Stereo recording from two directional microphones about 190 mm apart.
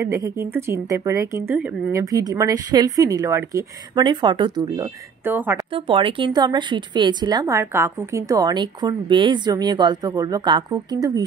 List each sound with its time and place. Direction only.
0.0 s speech: 15° right (ahead or behind)
5.7 s speech: 25° right (ahead or behind)